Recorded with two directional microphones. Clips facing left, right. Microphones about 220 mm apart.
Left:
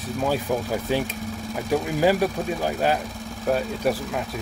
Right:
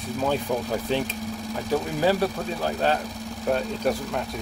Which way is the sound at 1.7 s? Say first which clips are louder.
Left 2 dB; 10° left (ahead or behind).